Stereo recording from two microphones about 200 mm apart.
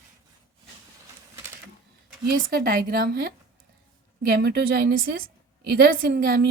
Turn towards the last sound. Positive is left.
turn(degrees=-50)  # may be behind; listen again after turning